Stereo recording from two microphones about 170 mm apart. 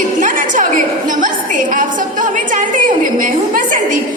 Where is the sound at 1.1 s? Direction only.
50° right (ahead or behind).